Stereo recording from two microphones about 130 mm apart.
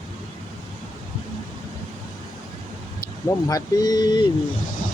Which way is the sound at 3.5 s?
30° left (ahead or behind).